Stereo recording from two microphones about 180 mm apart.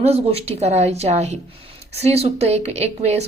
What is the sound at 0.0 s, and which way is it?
A woman's voice, 35° right (ahead or behind).